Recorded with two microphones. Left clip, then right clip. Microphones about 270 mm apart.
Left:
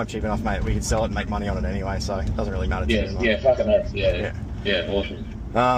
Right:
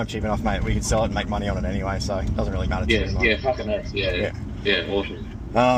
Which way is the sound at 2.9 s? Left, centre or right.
Right.